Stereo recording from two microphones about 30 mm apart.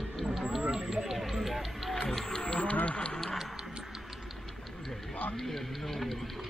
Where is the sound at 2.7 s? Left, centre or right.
Left.